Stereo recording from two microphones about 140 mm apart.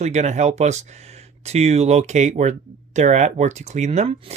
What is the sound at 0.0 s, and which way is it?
Speech, 55° right (ahead or behind).